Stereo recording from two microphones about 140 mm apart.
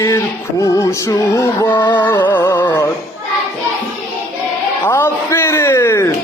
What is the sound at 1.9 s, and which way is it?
Music, 15° left (ahead or behind).